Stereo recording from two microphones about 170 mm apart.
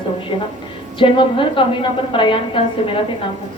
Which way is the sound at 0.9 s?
30° left (ahead or behind).